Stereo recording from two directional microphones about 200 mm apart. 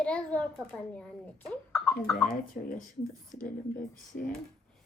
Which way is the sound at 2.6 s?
40° left (ahead or behind).